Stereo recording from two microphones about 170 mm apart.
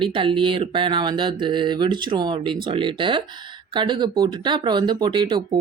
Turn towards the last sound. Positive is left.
turn(degrees=-25)  # may be behind; listen again after turning